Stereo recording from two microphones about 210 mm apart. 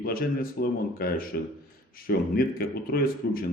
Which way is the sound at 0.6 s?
45° left (ahead or behind).